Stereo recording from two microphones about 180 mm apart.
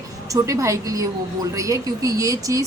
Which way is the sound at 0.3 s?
20° right (ahead or behind).